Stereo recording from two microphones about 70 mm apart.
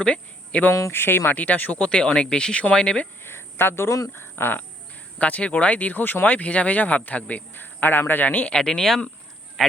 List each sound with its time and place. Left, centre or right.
0.0 s speech: centre
0.7 s speech: left; by 3.1 s centre
3.2 s a sound: left
4.2 s speech: left
5.2 s speech: centre
8.5 s speech: centre